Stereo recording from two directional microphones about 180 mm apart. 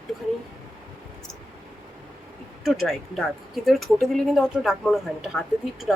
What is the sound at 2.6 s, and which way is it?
Speech, centre (ahead or behind).